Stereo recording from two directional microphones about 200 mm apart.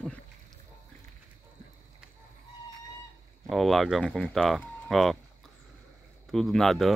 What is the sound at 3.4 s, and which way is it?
Speech, centre (ahead or behind).